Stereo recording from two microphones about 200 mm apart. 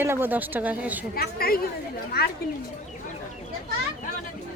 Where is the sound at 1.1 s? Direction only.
50° left (ahead or behind).